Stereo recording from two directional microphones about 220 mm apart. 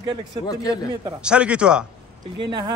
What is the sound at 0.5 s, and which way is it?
Speech, 15° left (ahead or behind).